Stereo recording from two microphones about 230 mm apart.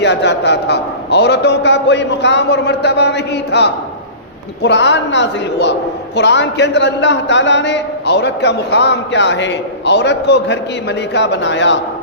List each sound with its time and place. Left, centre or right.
0.0 s a man's voice: left